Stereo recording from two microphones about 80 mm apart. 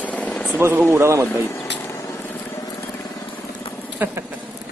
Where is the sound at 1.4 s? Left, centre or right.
Left.